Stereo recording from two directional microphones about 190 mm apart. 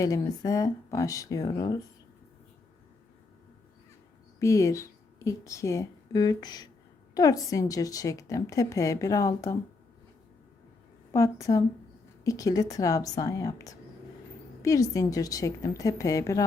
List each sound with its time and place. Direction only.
0.0 s a woman's voice: 20° left (ahead or behind)
4.4 s a woman's voice: 15° left (ahead or behind)
11.1 s a woman's voice: 15° left (ahead or behind)